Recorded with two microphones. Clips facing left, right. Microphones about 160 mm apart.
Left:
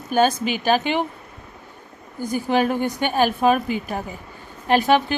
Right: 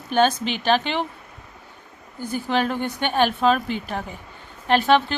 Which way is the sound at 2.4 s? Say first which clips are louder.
Left 3 dB; 10° left (ahead or behind).